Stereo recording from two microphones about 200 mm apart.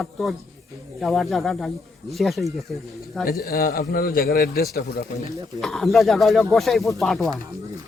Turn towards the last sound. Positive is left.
turn(degrees=0)  # may be behind; listen again after turning